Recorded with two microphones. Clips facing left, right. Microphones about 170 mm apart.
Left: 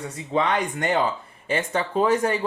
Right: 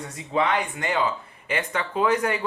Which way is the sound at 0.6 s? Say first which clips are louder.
Left 3 dB; 45° left (ahead or behind).